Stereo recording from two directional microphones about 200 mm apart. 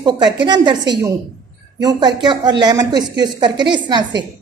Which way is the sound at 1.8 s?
20° right (ahead or behind).